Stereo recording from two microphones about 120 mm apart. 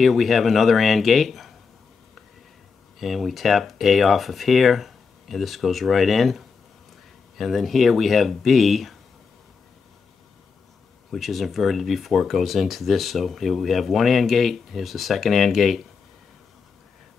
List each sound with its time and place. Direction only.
0.0 s speech: centre (ahead or behind)
3.0 s speech: centre (ahead or behind)
11.1 s speech: centre (ahead or behind)